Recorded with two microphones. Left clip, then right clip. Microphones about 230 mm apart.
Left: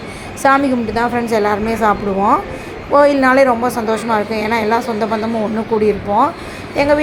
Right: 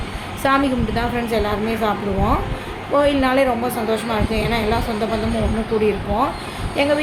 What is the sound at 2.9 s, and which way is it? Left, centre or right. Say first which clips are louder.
A woman's voice: left 6 dB; centre.